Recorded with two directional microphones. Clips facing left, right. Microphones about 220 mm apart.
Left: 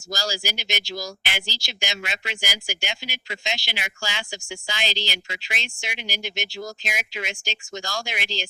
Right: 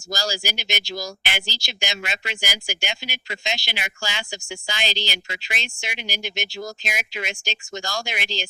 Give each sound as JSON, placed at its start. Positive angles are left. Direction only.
{"t": 0.1, "sound": "speech", "side_deg": -45}
{"t": 0.9, "sound": "speech", "side_deg": -20}
{"t": 1.2, "sound": "speech", "side_deg": -55}
{"t": 8.2, "sound": "speech", "side_deg": -20}